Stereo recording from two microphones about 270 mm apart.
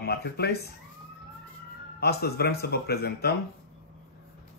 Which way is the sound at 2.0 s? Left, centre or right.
Left.